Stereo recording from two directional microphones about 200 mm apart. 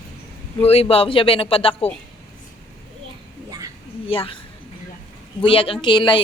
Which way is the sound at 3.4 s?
20° right (ahead or behind).